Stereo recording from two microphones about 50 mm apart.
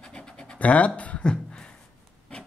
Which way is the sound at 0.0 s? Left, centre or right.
Centre.